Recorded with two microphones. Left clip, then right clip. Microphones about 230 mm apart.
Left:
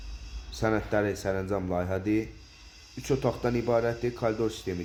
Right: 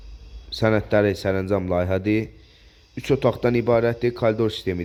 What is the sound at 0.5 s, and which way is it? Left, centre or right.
Speech, right.